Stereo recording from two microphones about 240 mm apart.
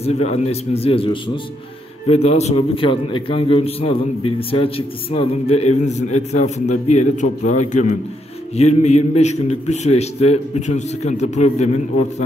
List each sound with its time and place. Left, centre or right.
0.0 s a man's voice: left